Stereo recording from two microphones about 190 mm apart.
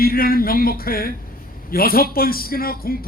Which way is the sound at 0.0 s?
50° left (ahead or behind).